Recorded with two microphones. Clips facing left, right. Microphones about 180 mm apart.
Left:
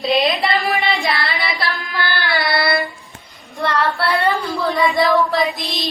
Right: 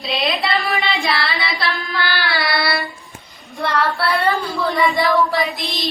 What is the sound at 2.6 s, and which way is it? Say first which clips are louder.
Child singing: left 3 dB; 20° left (ahead or behind).